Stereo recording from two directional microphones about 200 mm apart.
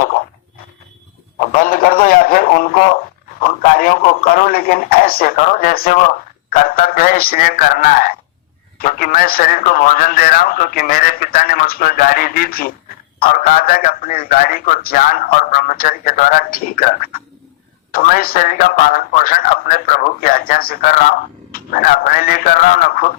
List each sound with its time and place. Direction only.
1.4 s speech: 45° left (ahead or behind)